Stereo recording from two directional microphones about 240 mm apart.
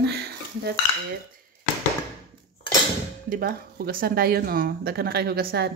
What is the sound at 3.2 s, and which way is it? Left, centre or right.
Speech, right.